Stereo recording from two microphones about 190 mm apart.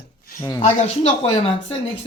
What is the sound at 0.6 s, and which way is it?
Speech, 35° left (ahead or behind).